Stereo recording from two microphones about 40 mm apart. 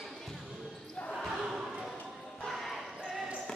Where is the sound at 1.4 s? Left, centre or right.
Centre.